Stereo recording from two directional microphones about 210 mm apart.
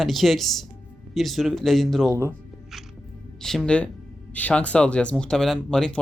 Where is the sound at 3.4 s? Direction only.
Centre (ahead or behind).